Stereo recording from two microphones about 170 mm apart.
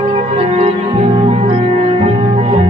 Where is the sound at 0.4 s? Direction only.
35° right (ahead or behind).